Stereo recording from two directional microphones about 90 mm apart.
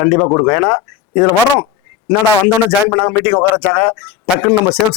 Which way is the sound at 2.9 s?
15° left (ahead or behind).